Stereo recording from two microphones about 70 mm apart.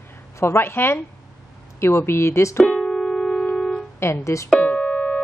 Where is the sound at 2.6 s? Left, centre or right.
Centre.